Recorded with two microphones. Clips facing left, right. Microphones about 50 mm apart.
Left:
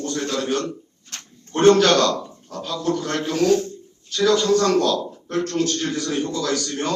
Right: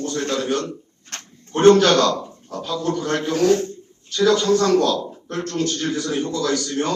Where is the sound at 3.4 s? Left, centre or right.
Right.